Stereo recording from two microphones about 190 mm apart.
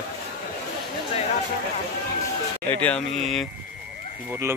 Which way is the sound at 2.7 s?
5° left (ahead or behind).